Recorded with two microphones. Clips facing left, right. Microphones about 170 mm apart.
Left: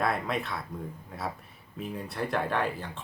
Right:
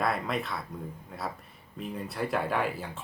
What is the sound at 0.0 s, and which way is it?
Speech, centre (ahead or behind).